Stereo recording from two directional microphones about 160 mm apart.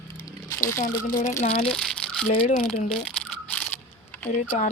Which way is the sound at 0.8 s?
55° left (ahead or behind).